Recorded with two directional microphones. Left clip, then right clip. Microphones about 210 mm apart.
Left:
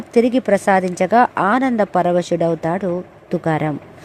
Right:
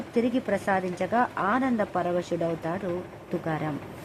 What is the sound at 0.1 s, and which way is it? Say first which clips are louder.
Speech: left 12 dB; 35° left (ahead or behind).